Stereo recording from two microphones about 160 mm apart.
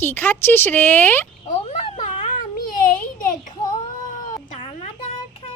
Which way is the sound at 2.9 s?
60° left (ahead or behind).